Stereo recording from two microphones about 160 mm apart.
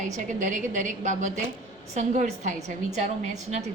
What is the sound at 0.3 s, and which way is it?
A woman's voice, 50° right (ahead or behind).